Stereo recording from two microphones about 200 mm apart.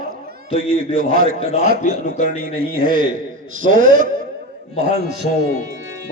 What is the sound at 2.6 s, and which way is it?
A man's voice, 45° right (ahead or behind).